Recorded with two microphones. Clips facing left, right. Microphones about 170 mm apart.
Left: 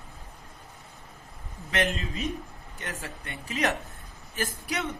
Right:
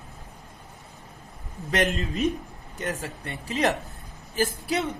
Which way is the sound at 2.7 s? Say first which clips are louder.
Right 7 dB; 40° right (ahead or behind).